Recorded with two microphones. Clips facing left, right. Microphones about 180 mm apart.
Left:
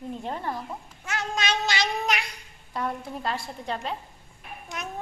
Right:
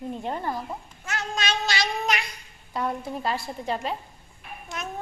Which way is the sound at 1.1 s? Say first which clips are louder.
Left 1 dB; 15° left (ahead or behind).